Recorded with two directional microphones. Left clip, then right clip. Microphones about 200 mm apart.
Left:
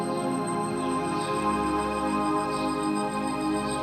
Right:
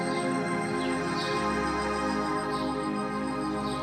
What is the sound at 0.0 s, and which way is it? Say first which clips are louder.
Music: left 1 dB; 35° left (ahead or behind).